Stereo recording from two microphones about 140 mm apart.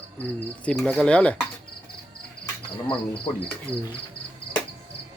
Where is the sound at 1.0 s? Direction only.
10° left (ahead or behind).